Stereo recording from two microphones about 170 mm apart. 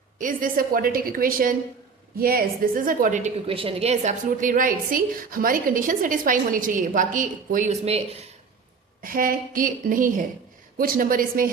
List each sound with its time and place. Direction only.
0.2 s a woman's voice: 55° right (ahead or behind); by 8.2 s 35° right (ahead or behind)
9.0 s a woman's voice: 55° right (ahead or behind)